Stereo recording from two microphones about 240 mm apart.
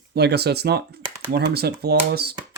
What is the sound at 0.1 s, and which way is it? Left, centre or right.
Speech, right.